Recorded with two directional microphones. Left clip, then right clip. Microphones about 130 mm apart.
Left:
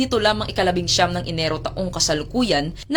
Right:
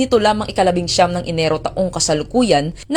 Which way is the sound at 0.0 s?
40° right (ahead or behind).